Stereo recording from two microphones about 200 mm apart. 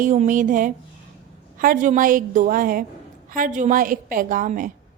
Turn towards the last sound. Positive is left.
turn(degrees=-45)  # may be behind; listen again after turning